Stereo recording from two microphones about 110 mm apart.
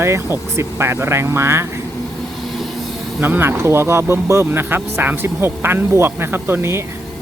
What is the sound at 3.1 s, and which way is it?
Speech, 20° right (ahead or behind).